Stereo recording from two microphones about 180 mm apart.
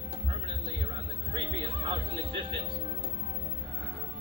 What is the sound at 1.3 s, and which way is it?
Music, 30° right (ahead or behind).